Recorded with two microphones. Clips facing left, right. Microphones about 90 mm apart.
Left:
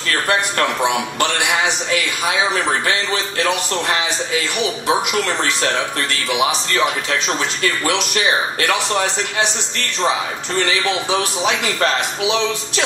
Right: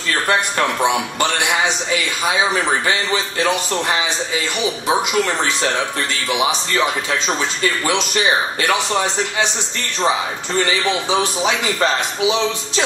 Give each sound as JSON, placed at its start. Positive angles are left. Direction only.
{"t": 0.8, "sound": "a man's voice", "side_deg": -20}
{"t": 2.9, "sound": "a man's voice", "side_deg": -15}
{"t": 4.8, "sound": "a man's voice", "side_deg": -15}
{"t": 11.1, "sound": "a man's voice", "side_deg": -15}